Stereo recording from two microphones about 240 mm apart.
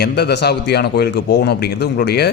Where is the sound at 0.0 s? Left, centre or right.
Left.